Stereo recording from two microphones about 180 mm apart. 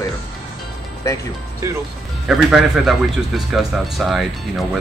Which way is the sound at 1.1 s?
15° left (ahead or behind).